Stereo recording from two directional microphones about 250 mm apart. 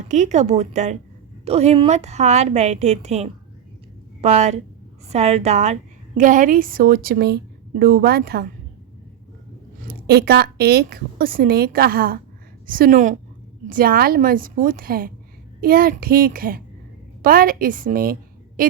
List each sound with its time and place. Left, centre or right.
0.1 s a woman's voice: right
9.8 s a woman's voice: right